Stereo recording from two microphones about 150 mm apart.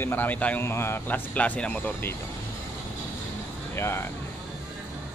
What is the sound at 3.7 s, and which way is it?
Speech, 15° left (ahead or behind).